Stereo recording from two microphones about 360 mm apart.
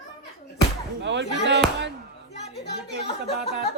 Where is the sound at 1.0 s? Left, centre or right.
Right.